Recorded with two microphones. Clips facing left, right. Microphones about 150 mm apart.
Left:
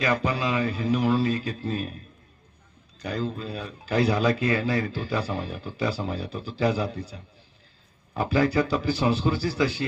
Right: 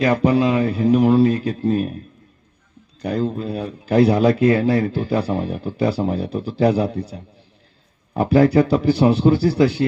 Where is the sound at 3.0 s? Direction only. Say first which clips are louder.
Right 8 dB; 55° right (ahead or behind).